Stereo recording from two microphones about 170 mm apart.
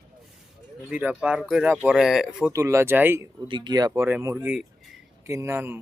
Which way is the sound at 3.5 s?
25° right (ahead or behind).